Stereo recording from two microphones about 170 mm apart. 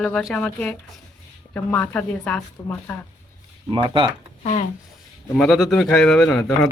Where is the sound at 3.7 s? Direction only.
30° right (ahead or behind).